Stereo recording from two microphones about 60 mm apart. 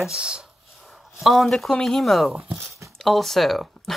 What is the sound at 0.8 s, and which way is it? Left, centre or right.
Speech, centre.